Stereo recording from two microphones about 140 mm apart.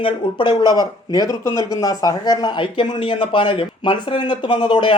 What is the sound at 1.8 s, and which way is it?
Speech, 25° left (ahead or behind).